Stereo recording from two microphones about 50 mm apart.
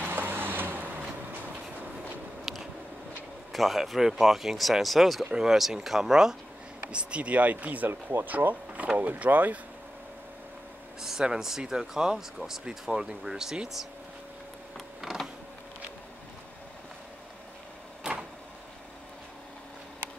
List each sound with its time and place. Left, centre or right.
0.0 s vehicle: right
2.5 s a sound: centre
3.5 s speech: centre
5.2 s speech: centre
6.9 s speech: right
7.9 s speech: right
8.3 s speech: right
11.0 s speech: centre
18.1 s vehicle: right